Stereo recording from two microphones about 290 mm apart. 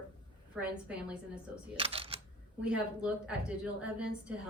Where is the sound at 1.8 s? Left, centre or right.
Centre.